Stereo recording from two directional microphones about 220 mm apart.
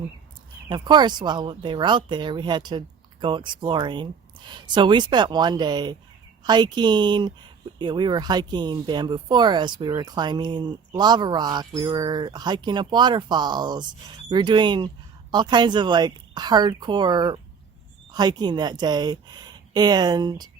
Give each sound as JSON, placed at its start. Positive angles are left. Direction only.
{"t": 0.7, "sound": "speech", "side_deg": -20}